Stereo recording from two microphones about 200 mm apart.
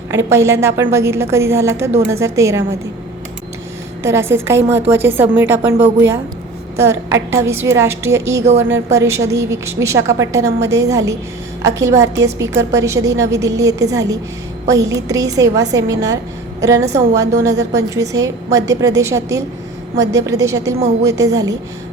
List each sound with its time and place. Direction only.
0.1 s a woman's voice: 15° right (ahead or behind)
4.0 s a woman's voice: 10° right (ahead or behind)
6.7 s a woman's voice: 15° right (ahead or behind)